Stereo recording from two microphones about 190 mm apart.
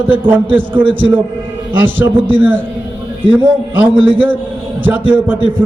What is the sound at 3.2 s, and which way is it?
Speech, 25° right (ahead or behind).